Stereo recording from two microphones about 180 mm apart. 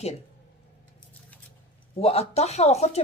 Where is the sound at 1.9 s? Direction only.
35° left (ahead or behind).